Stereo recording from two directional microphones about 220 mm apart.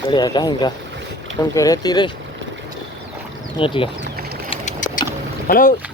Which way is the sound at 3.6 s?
25° left (ahead or behind).